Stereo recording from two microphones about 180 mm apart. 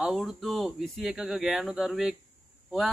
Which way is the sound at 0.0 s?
Centre (ahead or behind).